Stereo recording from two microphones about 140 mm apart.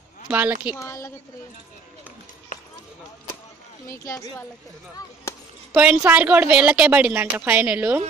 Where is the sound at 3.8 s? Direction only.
20° left (ahead or behind).